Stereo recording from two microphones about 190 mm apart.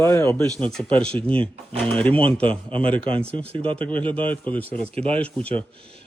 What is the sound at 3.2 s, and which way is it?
Speech, 30° right (ahead or behind).